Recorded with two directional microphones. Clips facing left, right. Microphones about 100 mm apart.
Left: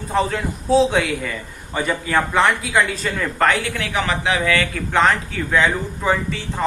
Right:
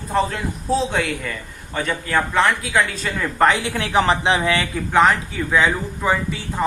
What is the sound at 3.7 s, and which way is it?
Speech, 30° right (ahead or behind).